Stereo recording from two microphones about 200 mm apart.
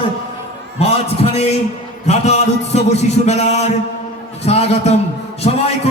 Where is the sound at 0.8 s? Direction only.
30° left (ahead or behind).